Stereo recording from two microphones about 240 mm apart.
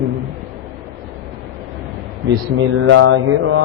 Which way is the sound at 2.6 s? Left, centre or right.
Right.